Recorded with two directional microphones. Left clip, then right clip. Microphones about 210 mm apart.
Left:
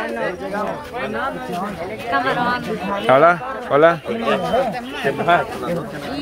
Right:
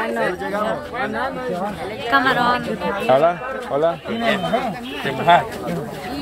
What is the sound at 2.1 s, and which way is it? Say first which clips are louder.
Speech: right 3 dB; 30° right (ahead or behind).